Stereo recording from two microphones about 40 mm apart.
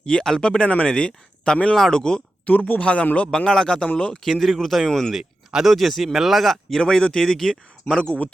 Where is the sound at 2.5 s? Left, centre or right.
Left.